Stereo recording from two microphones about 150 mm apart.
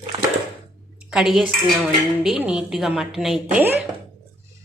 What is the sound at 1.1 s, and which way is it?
A woman's voice, centre (ahead or behind).